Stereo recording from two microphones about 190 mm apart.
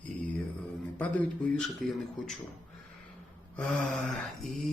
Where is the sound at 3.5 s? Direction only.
5° left (ahead or behind).